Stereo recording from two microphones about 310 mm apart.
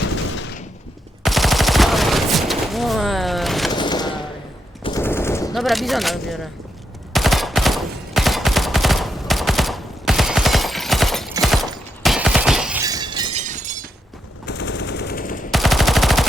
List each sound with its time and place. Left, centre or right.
1.2 s machine gun: centre
3.7 s gunshot: centre
4.8 s machine gun: centre
7.1 s fusillade: centre
12.0 s shatter: centre; by 13.8 s right
14.4 s machine gun: left
15.4 s machine gun: centre